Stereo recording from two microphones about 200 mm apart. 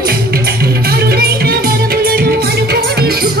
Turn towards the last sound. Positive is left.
turn(degrees=-50)  # may be behind; listen again after turning